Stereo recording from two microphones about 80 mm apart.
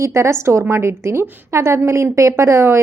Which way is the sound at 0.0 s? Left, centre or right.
Right.